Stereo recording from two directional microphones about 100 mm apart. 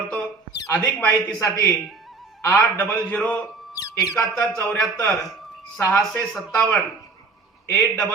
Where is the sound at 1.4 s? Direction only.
25° left (ahead or behind).